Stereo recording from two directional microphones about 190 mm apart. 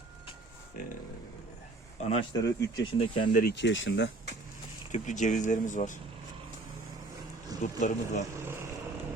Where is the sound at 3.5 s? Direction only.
75° left (ahead or behind).